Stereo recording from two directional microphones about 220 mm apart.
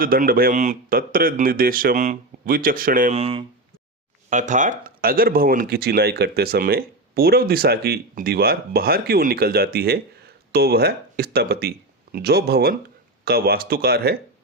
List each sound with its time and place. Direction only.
0.0 s speech: 40° right (ahead or behind)